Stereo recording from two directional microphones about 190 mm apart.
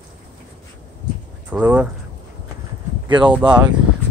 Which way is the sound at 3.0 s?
25° right (ahead or behind).